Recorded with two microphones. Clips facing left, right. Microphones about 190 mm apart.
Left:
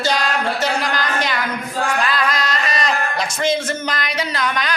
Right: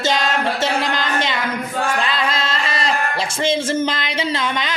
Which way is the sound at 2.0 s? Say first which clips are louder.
Left 1 dB; 25° right (ahead or behind).